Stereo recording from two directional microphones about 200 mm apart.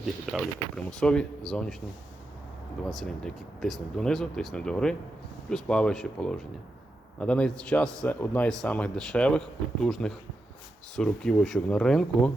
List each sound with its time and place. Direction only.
0.0 s a man's voice: centre (ahead or behind)
2.8 s a man's voice: centre (ahead or behind)